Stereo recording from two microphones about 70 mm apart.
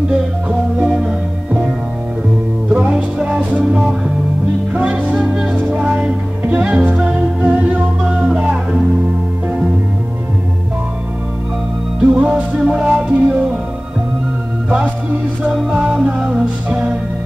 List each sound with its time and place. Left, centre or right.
0.1 s music: centre
2.7 s music: centre
4.7 s music: centre
12.0 s music: centre
15.7 s music: centre